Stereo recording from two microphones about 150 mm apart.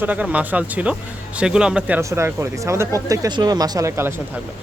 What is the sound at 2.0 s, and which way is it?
Speech, 20° right (ahead or behind).